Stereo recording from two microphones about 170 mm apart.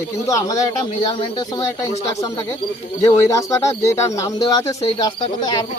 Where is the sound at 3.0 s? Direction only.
20° left (ahead or behind).